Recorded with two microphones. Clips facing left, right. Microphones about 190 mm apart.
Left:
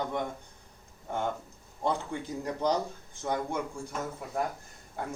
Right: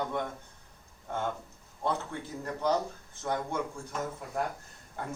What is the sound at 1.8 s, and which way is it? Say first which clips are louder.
Speech: left 2 dB; 15° left (ahead or behind).